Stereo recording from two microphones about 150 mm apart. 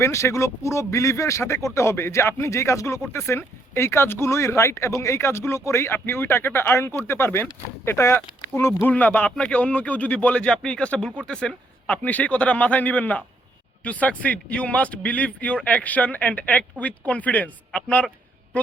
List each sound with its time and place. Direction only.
0.0 s speech: 20° left (ahead or behind)